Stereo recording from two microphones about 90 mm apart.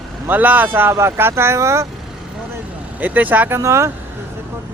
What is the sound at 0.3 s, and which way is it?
Speech, 20° right (ahead or behind).